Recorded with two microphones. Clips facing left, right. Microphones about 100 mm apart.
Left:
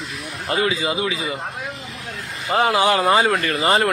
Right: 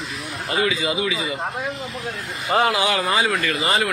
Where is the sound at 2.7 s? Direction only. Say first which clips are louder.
Left 4 dB; 35° left (ahead or behind).